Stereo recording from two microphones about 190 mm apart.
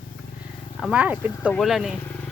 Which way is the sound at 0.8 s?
5° right (ahead or behind).